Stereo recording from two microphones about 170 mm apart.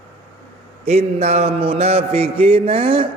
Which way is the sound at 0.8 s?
40° right (ahead or behind).